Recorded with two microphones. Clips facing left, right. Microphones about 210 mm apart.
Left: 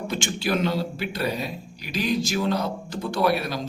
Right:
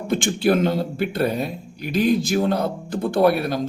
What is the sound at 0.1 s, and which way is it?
A man's voice, 55° right (ahead or behind).